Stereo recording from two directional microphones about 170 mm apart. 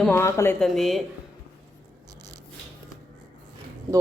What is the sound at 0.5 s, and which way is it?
Speech, centre (ahead or behind).